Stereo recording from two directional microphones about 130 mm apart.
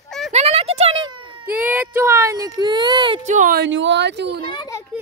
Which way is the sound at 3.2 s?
75° right (ahead or behind).